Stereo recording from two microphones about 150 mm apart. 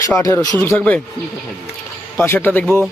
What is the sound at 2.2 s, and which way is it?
Speech, 15° left (ahead or behind).